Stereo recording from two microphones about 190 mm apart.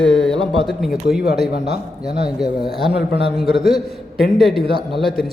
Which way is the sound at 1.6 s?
35° right (ahead or behind).